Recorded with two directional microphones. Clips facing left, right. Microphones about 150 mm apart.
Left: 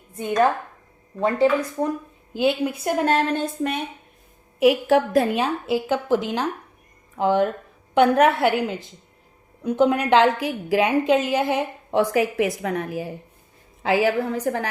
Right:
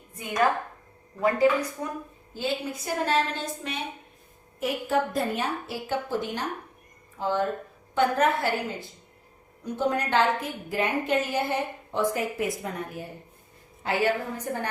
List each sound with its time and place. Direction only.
1.2 s a woman's voice: 25° left (ahead or behind)
2.3 s a woman's voice: 65° left (ahead or behind)
4.6 s a woman's voice: 80° left
7.2 s a woman's voice: 70° left (ahead or behind); by 14.7 s 90° left